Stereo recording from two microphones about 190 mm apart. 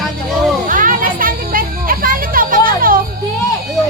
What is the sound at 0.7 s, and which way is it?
Music, 45° right (ahead or behind).